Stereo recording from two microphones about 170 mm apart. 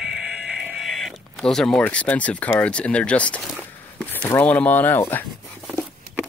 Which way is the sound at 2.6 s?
5° left (ahead or behind).